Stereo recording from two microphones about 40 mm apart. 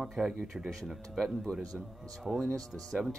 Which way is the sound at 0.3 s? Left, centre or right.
Centre.